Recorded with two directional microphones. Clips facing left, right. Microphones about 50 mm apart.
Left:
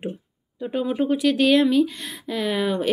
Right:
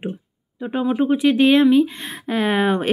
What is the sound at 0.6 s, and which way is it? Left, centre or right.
Speech, centre.